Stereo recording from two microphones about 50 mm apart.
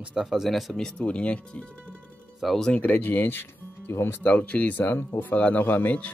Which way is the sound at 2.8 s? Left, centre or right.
Left.